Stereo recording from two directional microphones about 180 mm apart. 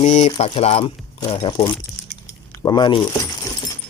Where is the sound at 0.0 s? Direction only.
40° left (ahead or behind).